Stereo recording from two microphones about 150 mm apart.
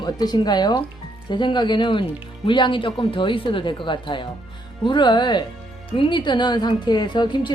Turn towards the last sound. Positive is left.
turn(degrees=30)  # may be behind; listen again after turning